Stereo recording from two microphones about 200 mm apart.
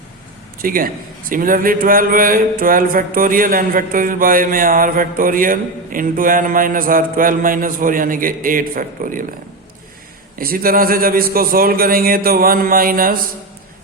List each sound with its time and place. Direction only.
0.6 s mantra: 45° right (ahead or behind)
10.3 s mantra: 45° right (ahead or behind)